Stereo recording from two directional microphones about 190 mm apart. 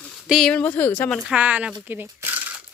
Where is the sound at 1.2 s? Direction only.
5° right (ahead or behind).